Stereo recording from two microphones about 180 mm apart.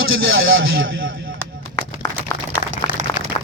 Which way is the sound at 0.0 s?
90° right.